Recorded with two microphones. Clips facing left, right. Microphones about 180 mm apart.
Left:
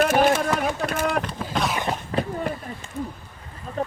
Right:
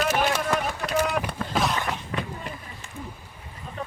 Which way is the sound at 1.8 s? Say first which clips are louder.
Left 5 dB; 30° left (ahead or behind).